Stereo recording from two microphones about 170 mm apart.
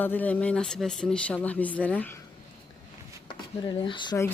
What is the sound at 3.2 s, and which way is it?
Speech, 30° left (ahead or behind).